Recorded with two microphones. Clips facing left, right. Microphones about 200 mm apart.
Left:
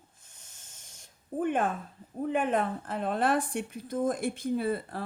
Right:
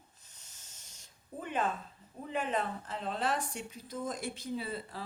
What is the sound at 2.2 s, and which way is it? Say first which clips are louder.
Speech: left 7 dB; 55° left (ahead or behind).